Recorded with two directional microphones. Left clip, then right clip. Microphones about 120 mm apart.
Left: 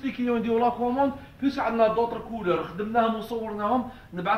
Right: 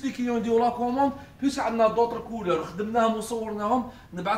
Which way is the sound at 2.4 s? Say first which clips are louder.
Even; 20° right (ahead or behind).